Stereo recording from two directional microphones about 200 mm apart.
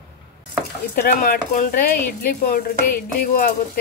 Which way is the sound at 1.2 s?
45° left (ahead or behind).